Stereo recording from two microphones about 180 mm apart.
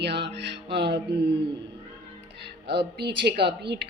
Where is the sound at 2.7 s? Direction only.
70° right (ahead or behind).